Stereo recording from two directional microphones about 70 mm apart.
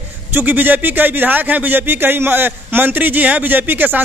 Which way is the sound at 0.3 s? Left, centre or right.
Right.